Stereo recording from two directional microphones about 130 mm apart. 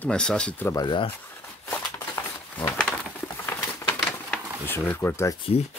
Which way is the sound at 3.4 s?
15° left (ahead or behind).